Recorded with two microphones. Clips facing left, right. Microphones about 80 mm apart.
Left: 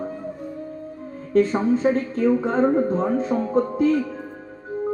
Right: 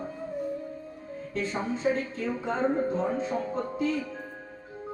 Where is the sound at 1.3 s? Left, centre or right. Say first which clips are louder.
Left 13 dB; left.